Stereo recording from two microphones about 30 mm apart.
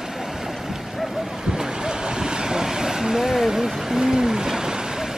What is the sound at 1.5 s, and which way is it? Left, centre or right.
Waves, right.